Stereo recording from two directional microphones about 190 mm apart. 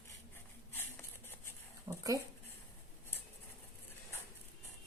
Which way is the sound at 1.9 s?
20° right (ahead or behind).